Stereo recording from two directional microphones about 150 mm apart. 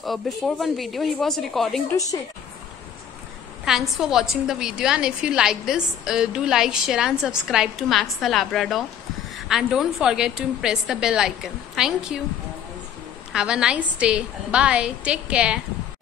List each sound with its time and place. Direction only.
0.0 s a woman's voice: centre (ahead or behind)
1.9 s a woman's voice: 20° left (ahead or behind)
3.6 s a woman's voice: centre (ahead or behind)
13.3 s a woman's voice: 5° right (ahead or behind)